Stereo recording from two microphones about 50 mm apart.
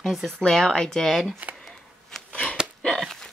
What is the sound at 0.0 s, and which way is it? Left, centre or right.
Speech, centre.